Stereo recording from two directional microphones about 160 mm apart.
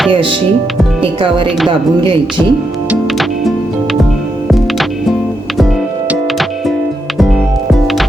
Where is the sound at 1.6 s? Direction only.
30° right (ahead or behind).